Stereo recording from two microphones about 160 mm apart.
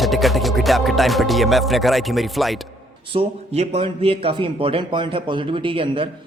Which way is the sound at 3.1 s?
40° right (ahead or behind).